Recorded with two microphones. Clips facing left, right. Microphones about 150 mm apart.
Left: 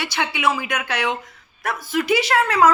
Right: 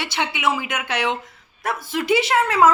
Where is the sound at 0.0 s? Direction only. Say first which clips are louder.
Left 1 dB; 20° right (ahead or behind).